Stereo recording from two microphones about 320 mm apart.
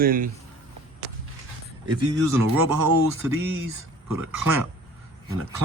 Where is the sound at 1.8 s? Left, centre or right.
Centre.